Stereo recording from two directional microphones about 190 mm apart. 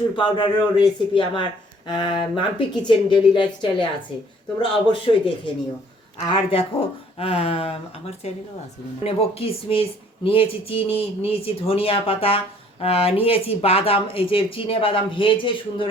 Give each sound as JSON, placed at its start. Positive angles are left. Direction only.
{"t": 0.2, "sound": "speech", "side_deg": 25}
{"t": 6.2, "sound": "speech", "side_deg": 25}